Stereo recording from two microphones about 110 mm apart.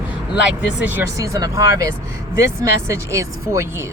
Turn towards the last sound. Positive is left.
turn(degrees=-25)  # may be behind; listen again after turning